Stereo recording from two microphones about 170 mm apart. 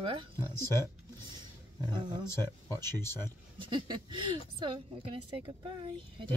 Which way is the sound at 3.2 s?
25° right (ahead or behind).